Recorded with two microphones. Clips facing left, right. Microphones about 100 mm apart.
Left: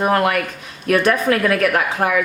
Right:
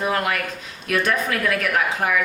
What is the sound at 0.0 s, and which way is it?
Speech, 50° left (ahead or behind).